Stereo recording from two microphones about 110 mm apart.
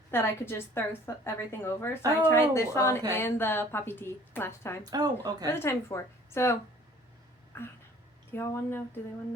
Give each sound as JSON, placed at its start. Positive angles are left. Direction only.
{"t": 0.1, "sound": "a woman's voice", "side_deg": 20}
{"t": 4.8, "sound": "speech", "side_deg": -35}
{"t": 5.5, "sound": "a woman's voice", "side_deg": 25}
{"t": 7.5, "sound": "a sound", "side_deg": 15}
{"t": 8.3, "sound": "a woman's voice", "side_deg": 20}